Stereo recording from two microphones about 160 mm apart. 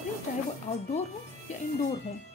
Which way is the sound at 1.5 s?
45° left (ahead or behind).